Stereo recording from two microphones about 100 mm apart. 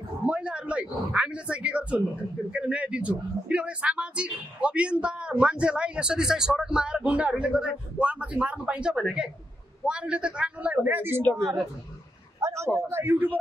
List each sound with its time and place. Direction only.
0.3 s speech: 10° right (ahead or behind)
11.3 s speech: centre (ahead or behind)
12.4 s a sound: 30° right (ahead or behind)
12.9 s speech: 20° right (ahead or behind)